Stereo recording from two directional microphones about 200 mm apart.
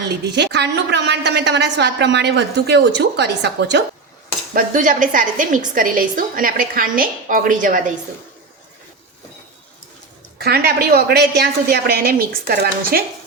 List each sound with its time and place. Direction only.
0.3 s a woman's voice: 60° right (ahead or behind)
4.5 s a woman's voice: 40° right (ahead or behind)
10.3 s a woman's voice: 50° right (ahead or behind)